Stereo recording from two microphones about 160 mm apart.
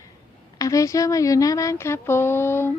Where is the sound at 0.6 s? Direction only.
20° left (ahead or behind).